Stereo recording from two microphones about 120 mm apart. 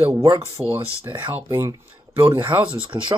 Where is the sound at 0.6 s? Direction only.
10° right (ahead or behind).